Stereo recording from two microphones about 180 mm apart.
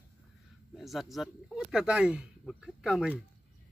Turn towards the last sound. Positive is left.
turn(degrees=-5)  # may be behind; listen again after turning